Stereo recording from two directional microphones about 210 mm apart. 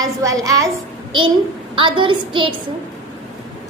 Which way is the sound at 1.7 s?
25° right (ahead or behind).